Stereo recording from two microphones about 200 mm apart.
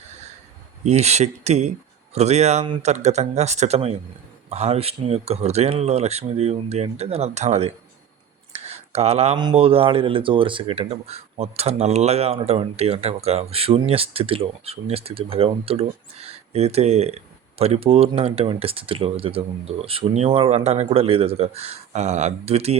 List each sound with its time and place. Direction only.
0.9 s speech: 35° right (ahead or behind)